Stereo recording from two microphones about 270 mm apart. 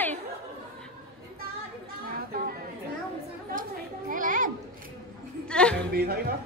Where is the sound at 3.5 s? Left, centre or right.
Right.